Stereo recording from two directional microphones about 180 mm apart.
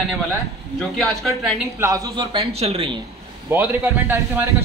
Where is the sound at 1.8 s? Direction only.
20° right (ahead or behind).